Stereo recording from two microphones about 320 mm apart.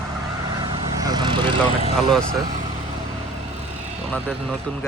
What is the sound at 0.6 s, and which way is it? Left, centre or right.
Vehicle, centre.